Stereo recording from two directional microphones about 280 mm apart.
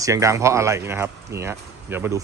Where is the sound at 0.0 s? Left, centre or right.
Centre.